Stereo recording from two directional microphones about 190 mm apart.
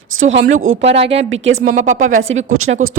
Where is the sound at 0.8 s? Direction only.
30° right (ahead or behind).